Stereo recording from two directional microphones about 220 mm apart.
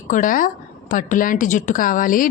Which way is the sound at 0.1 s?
40° left (ahead or behind).